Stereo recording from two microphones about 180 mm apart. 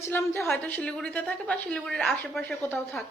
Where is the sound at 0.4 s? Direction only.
5° left (ahead or behind).